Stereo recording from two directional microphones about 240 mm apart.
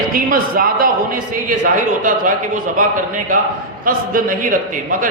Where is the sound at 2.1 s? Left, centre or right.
Right.